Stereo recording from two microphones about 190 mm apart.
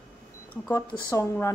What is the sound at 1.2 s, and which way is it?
Speech, 15° left (ahead or behind).